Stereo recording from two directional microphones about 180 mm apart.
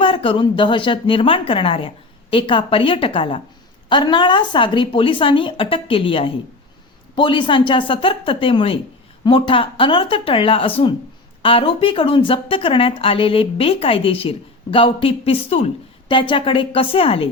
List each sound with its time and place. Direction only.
0.0 s a woman's voice: 30° left (ahead or behind)